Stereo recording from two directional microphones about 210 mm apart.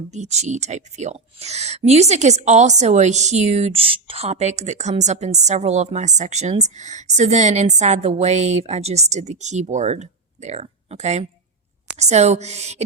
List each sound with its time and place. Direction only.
0.1 s speech: 35° right (ahead or behind)